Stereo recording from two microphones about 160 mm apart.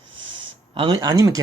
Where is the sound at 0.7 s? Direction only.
30° right (ahead or behind).